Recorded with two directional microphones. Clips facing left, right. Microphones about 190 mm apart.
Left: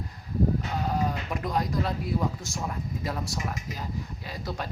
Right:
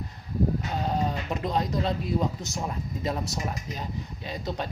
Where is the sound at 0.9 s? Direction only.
25° right (ahead or behind).